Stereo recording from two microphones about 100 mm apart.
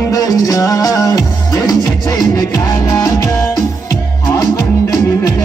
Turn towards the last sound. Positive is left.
turn(degrees=35)  # may be behind; listen again after turning